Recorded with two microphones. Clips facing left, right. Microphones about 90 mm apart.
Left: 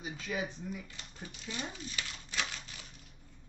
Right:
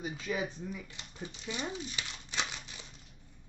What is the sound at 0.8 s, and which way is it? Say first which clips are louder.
Speech: right 3 dB; 20° right (ahead or behind).